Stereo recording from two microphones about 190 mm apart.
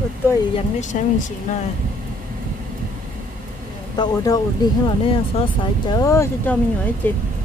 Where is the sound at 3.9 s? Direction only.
20° left (ahead or behind).